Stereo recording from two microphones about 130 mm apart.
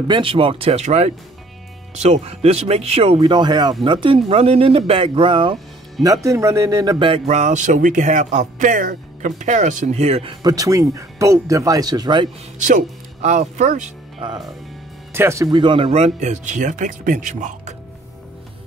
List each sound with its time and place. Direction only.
0.1 s speech: 45° right (ahead or behind)
6.0 s speech: 25° right (ahead or behind); by 7.3 s 40° right (ahead or behind)
7.3 s speech: 70° right (ahead or behind)
10.4 s speech: 25° right (ahead or behind)
12.5 s speech: 75° right (ahead or behind)
14.2 s speech: 35° right (ahead or behind)
15.1 s speech: 20° right (ahead or behind)
15.5 s speech: 40° right (ahead or behind)
15.9 s speech: 60° right (ahead or behind); by 17.7 s 75° right (ahead or behind)